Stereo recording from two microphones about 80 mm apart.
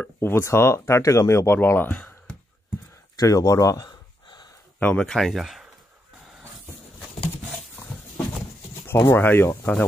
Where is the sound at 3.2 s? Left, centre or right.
Left.